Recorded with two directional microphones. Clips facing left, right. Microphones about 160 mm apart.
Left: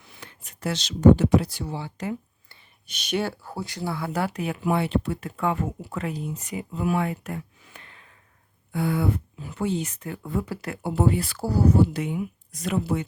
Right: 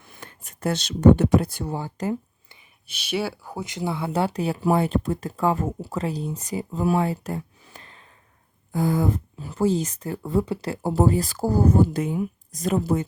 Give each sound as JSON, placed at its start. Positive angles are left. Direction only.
{"t": 0.0, "sound": "a sound", "side_deg": -50}
{"t": 1.2, "sound": "speech", "side_deg": -55}
{"t": 2.8, "sound": "speech", "side_deg": -5}